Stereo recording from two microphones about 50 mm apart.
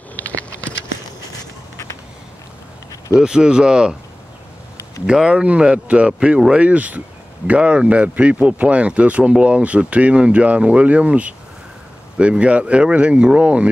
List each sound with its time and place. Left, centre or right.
0.1 s a sound: left
3.2 s speech: centre
5.0 s speech: centre